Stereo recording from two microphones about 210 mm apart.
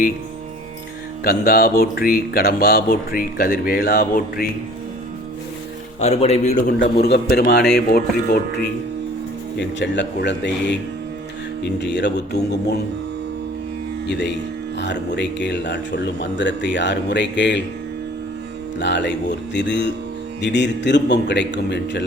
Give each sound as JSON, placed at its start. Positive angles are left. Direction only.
{"t": 1.2, "sound": "speech", "side_deg": 45}
{"t": 6.0, "sound": "a man's voice", "side_deg": 30}
{"t": 6.7, "sound": "speech", "side_deg": 50}
{"t": 9.6, "sound": "speech", "side_deg": 55}
{"t": 11.8, "sound": "speech", "side_deg": 55}
{"t": 14.1, "sound": "speech", "side_deg": 55}
{"t": 18.8, "sound": "speech", "side_deg": 55}